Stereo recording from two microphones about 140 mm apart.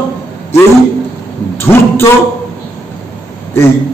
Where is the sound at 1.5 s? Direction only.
20° left (ahead or behind).